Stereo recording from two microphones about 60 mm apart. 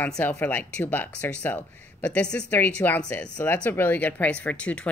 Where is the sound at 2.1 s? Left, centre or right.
Centre.